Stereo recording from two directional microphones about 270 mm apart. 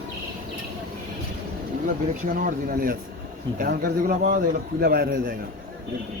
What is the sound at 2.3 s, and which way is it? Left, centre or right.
A man's voice, right.